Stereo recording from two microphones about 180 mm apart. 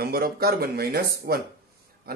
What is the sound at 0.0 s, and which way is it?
Speech, 55° right (ahead or behind).